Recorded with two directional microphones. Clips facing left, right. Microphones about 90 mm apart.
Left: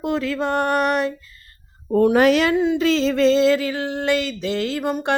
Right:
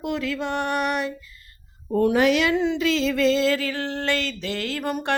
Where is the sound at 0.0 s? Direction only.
35° left (ahead or behind).